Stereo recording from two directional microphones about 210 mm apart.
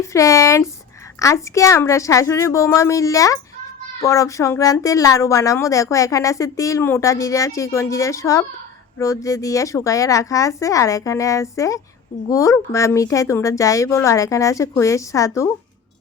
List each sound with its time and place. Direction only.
0.0 s a woman's voice: 15° left (ahead or behind)